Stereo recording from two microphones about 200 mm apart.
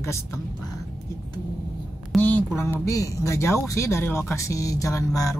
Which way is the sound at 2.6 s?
15° left (ahead or behind).